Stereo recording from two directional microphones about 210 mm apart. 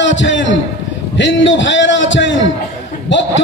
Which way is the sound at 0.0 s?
60° left (ahead or behind).